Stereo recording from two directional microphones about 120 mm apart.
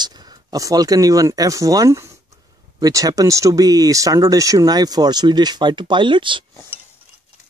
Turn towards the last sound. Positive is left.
turn(degrees=-45)  # may be behind; listen again after turning